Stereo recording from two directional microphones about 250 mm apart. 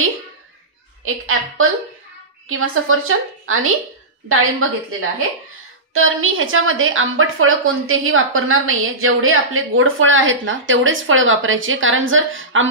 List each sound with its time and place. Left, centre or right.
1.0 s a sound: right
2.4 s a woman's voice: right
5.9 s a woman's voice: right